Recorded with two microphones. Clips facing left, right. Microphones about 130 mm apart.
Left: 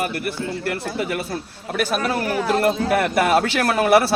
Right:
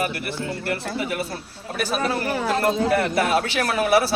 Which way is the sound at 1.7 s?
65° left (ahead or behind).